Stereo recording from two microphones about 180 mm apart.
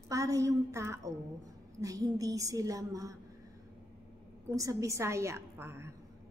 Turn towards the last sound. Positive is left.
turn(degrees=-15)  # may be behind; listen again after turning